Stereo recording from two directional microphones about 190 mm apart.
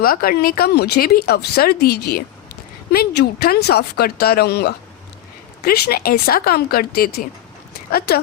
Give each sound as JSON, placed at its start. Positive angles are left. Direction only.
{"t": 0.0, "sound": "speech", "side_deg": 50}